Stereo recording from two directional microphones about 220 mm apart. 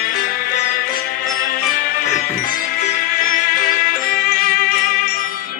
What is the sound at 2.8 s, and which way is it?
Music, 40° left (ahead or behind).